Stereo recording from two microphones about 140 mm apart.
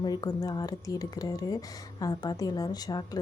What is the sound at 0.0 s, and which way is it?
A woman's voice, 30° left (ahead or behind).